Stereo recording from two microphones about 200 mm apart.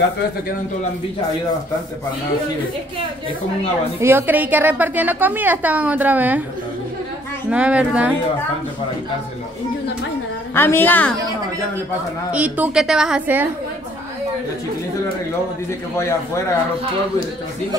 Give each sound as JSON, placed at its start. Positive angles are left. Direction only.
{"t": 4.0, "sound": "a woman's voice", "side_deg": -10}
{"t": 7.4, "sound": "speech", "side_deg": -5}
{"t": 10.5, "sound": "a woman's voice", "side_deg": 10}
{"t": 12.3, "sound": "a woman's voice", "side_deg": -5}